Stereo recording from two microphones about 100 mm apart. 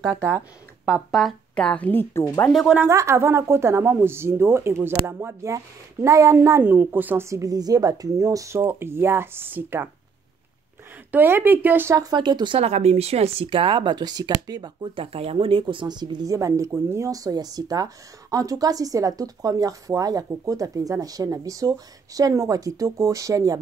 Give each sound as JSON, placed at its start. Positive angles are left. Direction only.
{"t": 0.4, "sound": "speech", "side_deg": -10}
{"t": 1.5, "sound": "a woman's voice", "side_deg": 10}
{"t": 2.5, "sound": "speech", "side_deg": 0}
{"t": 2.9, "sound": "speech", "side_deg": -30}
{"t": 7.2, "sound": "speech", "side_deg": -35}
{"t": 8.6, "sound": "speech", "side_deg": -25}
{"t": 11.1, "sound": "speech", "side_deg": -20}
{"t": 11.9, "sound": "speech", "side_deg": -40}
{"t": 12.5, "sound": "speech", "side_deg": -90}
{"t": 15.0, "sound": "speech", "side_deg": -70}